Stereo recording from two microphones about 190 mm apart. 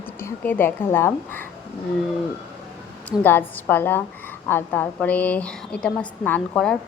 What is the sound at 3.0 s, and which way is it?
A woman's voice, 10° left (ahead or behind).